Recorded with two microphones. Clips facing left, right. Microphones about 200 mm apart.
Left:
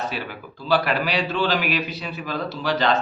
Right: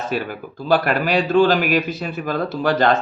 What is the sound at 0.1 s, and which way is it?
A man's voice, 50° right (ahead or behind).